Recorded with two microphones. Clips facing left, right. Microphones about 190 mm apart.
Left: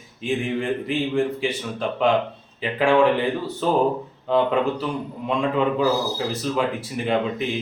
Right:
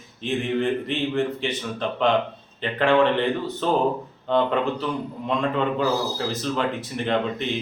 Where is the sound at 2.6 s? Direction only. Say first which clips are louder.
Left 1 dB; 5° left (ahead or behind).